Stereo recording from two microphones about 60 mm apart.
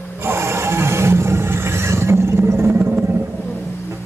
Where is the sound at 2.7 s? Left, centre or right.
Right.